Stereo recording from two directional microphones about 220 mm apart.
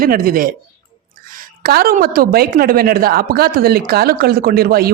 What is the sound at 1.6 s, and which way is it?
Speech, 45° right (ahead or behind).